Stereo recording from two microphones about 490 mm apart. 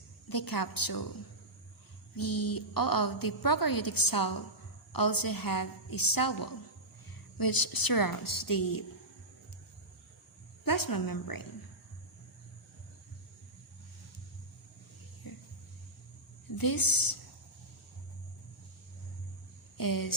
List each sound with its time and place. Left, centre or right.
0.3 s a woman's voice: left
2.1 s a woman's voice: left
10.6 s a woman's voice: left
15.3 s a sound: left
16.6 s a woman's voice: left
19.7 s speech: left